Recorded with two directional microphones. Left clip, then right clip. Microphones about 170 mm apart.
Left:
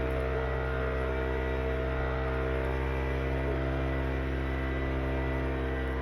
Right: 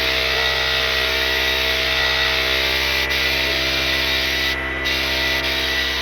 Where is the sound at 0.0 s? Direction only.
35° left (ahead or behind).